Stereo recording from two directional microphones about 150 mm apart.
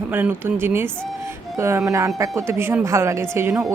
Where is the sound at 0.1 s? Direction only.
15° right (ahead or behind).